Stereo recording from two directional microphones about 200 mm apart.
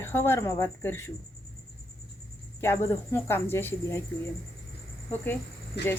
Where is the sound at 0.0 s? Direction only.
10° left (ahead or behind).